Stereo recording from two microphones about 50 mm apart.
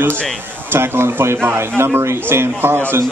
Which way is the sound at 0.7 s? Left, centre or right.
Right.